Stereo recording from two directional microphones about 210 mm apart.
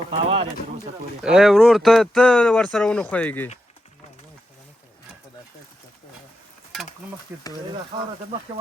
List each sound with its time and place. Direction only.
0.1 s bird: 25° right (ahead or behind)
1.2 s speech: 5° right (ahead or behind)
7.3 s speech: 10° right (ahead or behind)
7.9 s speech: 25° right (ahead or behind)